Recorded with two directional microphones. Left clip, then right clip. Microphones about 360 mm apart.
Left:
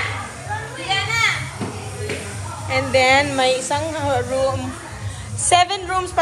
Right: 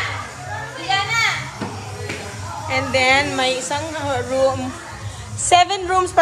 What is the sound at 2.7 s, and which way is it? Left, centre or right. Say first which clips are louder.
A woman's voice: left 1 dB; centre.